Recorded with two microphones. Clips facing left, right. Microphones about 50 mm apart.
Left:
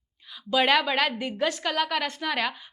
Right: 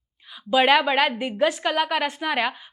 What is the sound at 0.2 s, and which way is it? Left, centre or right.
Speech, centre.